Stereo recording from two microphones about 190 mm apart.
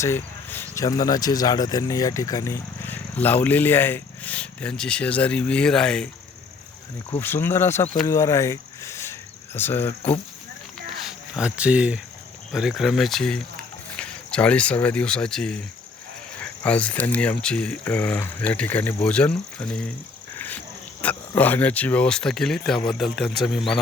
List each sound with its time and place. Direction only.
0.0 s speech: 10° left (ahead or behind)
7.2 s speech: 10° left (ahead or behind)
11.0 s speech: 5° right (ahead or behind)
21.0 s speech: 10° left (ahead or behind)